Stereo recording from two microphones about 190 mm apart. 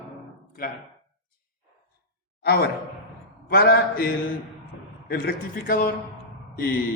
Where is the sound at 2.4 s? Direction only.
55° left (ahead or behind).